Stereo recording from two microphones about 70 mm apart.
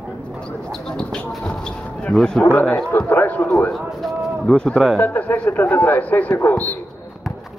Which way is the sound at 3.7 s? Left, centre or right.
Centre.